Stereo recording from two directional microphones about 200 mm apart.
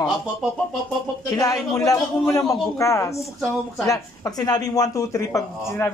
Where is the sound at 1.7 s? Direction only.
15° left (ahead or behind).